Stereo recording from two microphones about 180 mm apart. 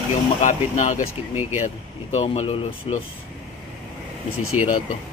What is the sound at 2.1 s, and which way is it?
Speech, 30° left (ahead or behind).